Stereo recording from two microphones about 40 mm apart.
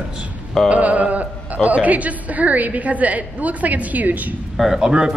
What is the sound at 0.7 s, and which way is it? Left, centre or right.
A woman's voice, right.